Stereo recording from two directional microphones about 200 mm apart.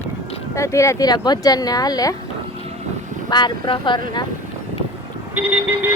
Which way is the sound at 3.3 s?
25° left (ahead or behind).